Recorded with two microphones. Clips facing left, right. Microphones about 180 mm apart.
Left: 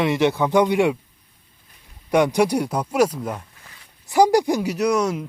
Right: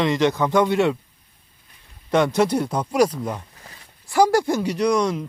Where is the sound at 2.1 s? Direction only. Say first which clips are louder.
Left 1 dB; 15° left (ahead or behind).